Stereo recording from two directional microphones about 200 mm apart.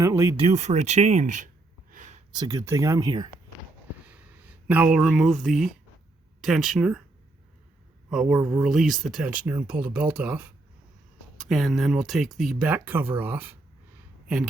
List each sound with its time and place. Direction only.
0.0 s speech: 15° right (ahead or behind)
0.3 s speech: 35° right (ahead or behind)
1.9 s a sound: 40° right (ahead or behind)
2.3 s speech: 20° right (ahead or behind)
4.7 s speech: 5° right (ahead or behind)
8.1 s speech: centre (ahead or behind)